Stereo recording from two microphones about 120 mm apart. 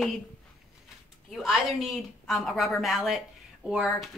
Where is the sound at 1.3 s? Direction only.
Centre (ahead or behind).